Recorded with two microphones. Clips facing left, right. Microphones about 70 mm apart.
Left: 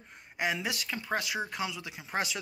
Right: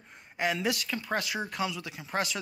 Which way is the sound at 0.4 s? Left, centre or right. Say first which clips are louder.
Right 3 dB; centre.